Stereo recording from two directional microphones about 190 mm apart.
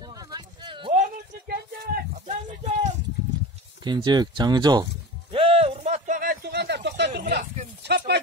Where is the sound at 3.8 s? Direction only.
20° right (ahead or behind).